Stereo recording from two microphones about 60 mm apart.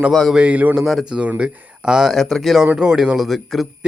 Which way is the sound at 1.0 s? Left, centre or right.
Centre.